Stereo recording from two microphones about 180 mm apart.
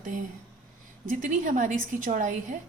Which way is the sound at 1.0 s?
45° right (ahead or behind).